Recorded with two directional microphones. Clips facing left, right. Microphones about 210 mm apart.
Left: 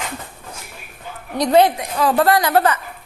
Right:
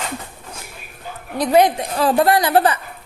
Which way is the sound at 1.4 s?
10° right (ahead or behind).